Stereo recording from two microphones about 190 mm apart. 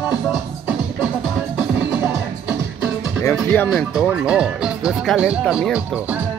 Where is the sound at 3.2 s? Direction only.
15° left (ahead or behind).